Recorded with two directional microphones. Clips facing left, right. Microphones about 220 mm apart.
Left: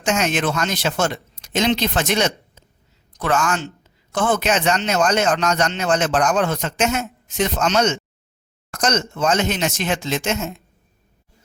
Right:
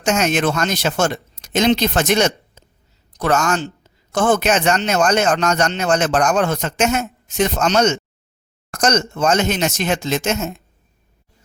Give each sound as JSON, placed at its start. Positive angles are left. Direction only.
{"t": 0.0, "sound": "a man's voice", "side_deg": -45}